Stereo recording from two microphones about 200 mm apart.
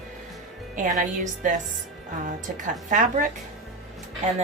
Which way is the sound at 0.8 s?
40° right (ahead or behind).